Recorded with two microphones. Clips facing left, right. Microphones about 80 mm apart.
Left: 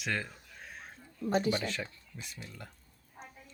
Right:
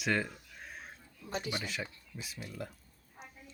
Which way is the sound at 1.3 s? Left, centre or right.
Left.